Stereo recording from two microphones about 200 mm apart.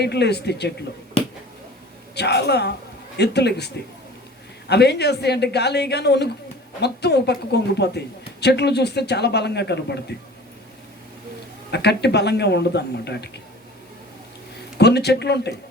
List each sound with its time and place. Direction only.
0.0 s speech: 55° left (ahead or behind)
2.1 s speech: 55° left (ahead or behind)
4.7 s speech: 55° left (ahead or behind)
11.7 s speech: 55° left (ahead or behind)
14.8 s speech: 55° left (ahead or behind)